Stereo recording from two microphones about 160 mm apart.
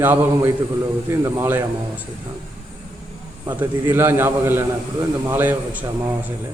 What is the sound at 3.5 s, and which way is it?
A man's voice, 10° right (ahead or behind).